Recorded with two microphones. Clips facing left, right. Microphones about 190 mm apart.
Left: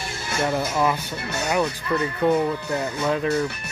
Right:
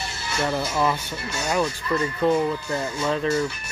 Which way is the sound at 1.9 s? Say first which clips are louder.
Left 1 dB; 15° left (ahead or behind).